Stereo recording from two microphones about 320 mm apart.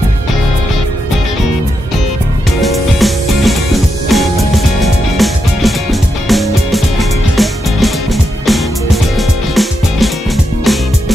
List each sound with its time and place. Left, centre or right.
2.6 s music: centre